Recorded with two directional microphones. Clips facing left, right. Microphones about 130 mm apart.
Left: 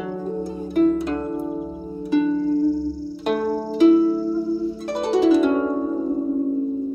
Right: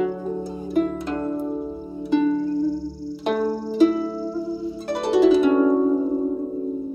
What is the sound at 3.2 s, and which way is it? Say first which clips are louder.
Music: left 1 dB; 5° left (ahead or behind).